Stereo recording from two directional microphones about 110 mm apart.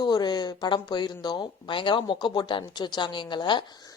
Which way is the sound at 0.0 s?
40° left (ahead or behind).